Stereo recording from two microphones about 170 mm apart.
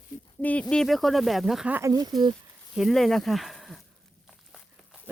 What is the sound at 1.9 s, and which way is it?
Speech, 20° right (ahead or behind).